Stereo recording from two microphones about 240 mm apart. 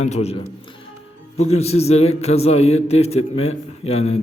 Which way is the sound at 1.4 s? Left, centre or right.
Left.